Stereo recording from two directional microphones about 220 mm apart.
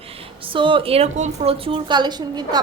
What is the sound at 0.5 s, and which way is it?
A woman's voice, 25° right (ahead or behind).